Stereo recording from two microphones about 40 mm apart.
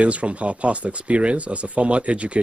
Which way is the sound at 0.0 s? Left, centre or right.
Right.